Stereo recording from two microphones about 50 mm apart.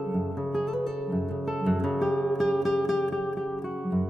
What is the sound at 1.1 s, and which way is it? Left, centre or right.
Music, centre.